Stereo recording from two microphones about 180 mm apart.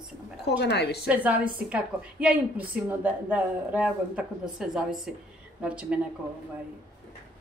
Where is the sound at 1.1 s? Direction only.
10° right (ahead or behind).